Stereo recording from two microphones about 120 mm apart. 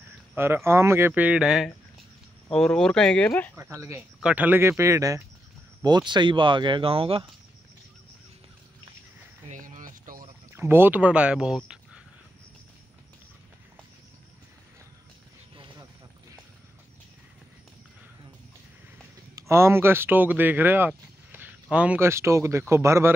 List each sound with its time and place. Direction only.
0.4 s speech: 20° right (ahead or behind)
2.5 s speech: 5° left (ahead or behind)
4.2 s speech: 10° right (ahead or behind)
5.9 s speech: 40° right (ahead or behind)
9.5 s a sound: 90° right
10.5 s speech: 20° right (ahead or behind)
15.5 s vehicle: 40° right (ahead or behind)
19.5 s speech: 20° right (ahead or behind)
22.0 s speech: 25° right (ahead or behind)